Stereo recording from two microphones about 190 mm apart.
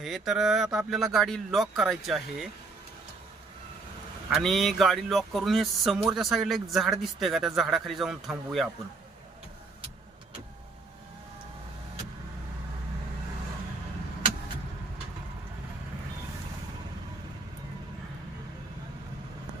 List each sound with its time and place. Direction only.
0.0 s speech: centre (ahead or behind)
4.3 s speech: centre (ahead or behind)